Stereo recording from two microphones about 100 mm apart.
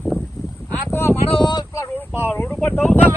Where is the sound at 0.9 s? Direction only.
25° left (ahead or behind).